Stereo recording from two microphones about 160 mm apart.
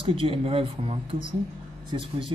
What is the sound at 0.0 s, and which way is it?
Speech, 35° right (ahead or behind).